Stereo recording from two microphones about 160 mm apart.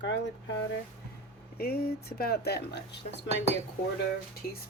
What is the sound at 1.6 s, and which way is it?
Speech, 75° left (ahead or behind).